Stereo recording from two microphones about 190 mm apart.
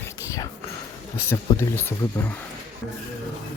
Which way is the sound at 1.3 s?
10° left (ahead or behind).